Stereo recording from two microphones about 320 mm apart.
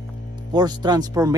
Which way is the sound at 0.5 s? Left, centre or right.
Centre.